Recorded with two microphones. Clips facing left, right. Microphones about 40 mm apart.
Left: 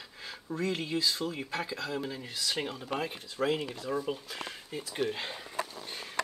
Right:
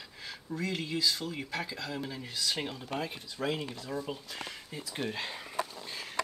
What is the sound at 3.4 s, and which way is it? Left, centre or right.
Speech, centre.